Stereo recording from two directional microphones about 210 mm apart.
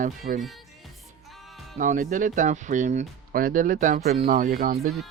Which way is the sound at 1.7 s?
40° right (ahead or behind).